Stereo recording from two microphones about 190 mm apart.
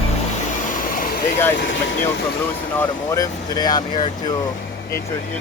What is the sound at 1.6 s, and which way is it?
Speech, 70° left (ahead or behind).